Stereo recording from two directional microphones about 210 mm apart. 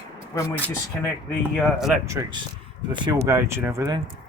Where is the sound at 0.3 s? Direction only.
10° left (ahead or behind).